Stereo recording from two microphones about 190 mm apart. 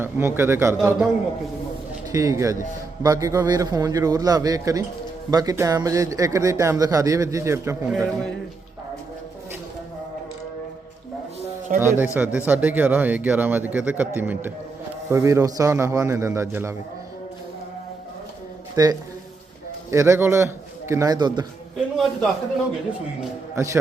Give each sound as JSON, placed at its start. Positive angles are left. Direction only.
{"t": 0.0, "sound": "a man's voice", "side_deg": -10}
{"t": 2.1, "sound": "a man's voice", "side_deg": -15}
{"t": 7.9, "sound": "a man's voice", "side_deg": 0}
{"t": 11.8, "sound": "a man's voice", "side_deg": -10}
{"t": 18.8, "sound": "a man's voice", "side_deg": -20}
{"t": 21.9, "sound": "a man's voice", "side_deg": 0}